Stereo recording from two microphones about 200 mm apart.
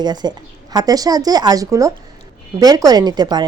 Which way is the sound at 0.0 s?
20° right (ahead or behind).